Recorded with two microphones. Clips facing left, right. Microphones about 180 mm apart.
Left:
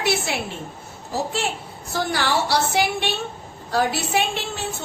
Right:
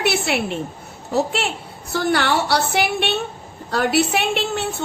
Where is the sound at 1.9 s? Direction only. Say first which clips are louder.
Right 4 dB; 65° right (ahead or behind).